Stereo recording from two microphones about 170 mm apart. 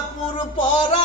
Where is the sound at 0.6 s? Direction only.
30° left (ahead or behind).